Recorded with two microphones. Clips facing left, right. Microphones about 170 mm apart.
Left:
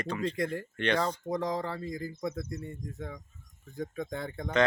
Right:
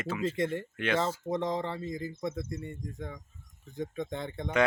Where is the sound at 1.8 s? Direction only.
20° right (ahead or behind).